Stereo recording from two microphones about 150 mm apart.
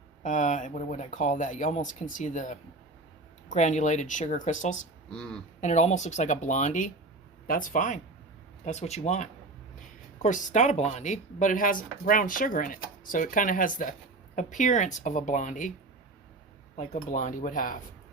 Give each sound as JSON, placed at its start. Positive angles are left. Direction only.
{"t": 0.2, "sound": "speech", "side_deg": 60}
{"t": 5.1, "sound": "speech", "side_deg": 5}
{"t": 5.5, "sound": "speech", "side_deg": 50}
{"t": 7.4, "sound": "speech", "side_deg": 65}
{"t": 8.6, "sound": "speech", "side_deg": 50}
{"t": 16.7, "sound": "speech", "side_deg": 50}